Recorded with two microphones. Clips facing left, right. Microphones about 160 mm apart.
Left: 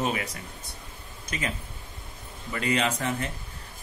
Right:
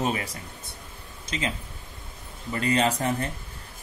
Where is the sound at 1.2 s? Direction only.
25° right (ahead or behind).